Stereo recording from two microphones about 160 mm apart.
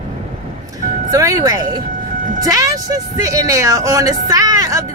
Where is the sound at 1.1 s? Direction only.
20° right (ahead or behind).